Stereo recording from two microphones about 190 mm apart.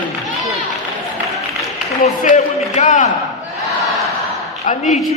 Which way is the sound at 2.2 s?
40° left (ahead or behind).